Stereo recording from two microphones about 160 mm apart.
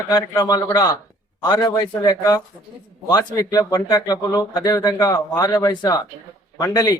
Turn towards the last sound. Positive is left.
turn(degrees=20)  # may be behind; listen again after turning